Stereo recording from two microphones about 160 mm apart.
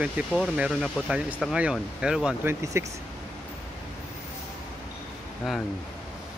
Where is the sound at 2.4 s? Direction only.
15° right (ahead or behind).